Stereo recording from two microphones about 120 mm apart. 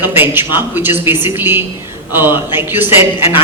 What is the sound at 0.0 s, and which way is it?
A man's voice, 15° right (ahead or behind).